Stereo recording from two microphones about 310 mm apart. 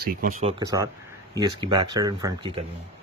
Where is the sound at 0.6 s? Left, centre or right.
Centre.